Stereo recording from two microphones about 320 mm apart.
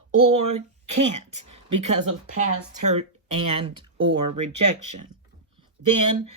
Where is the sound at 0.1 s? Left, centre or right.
Right.